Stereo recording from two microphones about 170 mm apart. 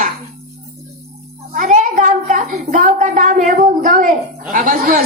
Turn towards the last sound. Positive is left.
turn(degrees=-55)  # may be behind; listen again after turning